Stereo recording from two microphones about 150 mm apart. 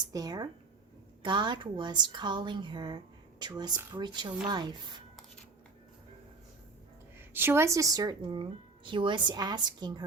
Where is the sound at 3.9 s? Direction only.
30° right (ahead or behind).